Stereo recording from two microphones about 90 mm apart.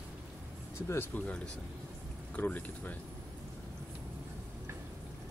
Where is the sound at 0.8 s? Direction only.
20° left (ahead or behind).